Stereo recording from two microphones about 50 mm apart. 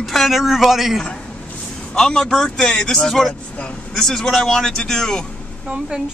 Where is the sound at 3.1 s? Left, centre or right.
Centre.